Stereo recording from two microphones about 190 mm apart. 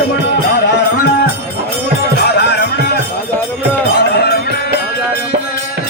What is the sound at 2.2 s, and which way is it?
Music, 60° left (ahead or behind).